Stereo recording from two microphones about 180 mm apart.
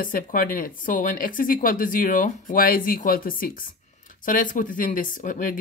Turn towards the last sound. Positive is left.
turn(degrees=50)  # may be behind; listen again after turning